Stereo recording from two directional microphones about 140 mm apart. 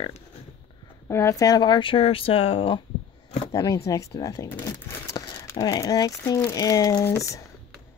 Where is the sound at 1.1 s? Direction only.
20° left (ahead or behind); by 2.8 s 40° left (ahead or behind).